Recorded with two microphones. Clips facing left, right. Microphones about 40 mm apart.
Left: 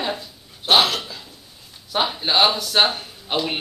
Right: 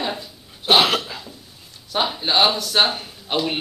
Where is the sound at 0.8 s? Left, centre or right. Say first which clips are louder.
Right 3 dB; centre.